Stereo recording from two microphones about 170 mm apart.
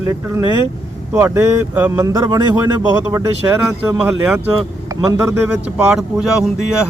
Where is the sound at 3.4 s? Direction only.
15° right (ahead or behind).